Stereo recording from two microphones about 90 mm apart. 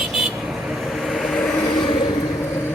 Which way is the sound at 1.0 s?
Centre (ahead or behind).